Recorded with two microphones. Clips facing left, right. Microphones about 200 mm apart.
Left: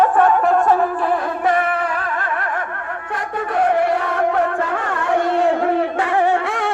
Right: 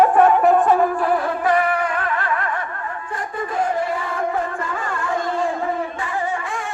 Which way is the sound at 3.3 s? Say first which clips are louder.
Left 5 dB; 70° left (ahead or behind).